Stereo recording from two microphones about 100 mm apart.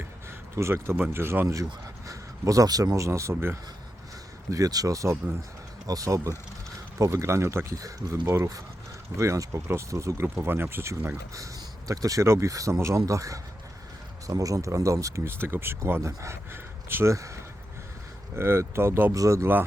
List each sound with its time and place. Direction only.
0.5 s speech: 25° right (ahead or behind)